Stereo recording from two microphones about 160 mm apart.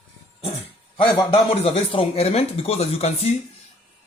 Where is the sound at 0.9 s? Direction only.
30° left (ahead or behind).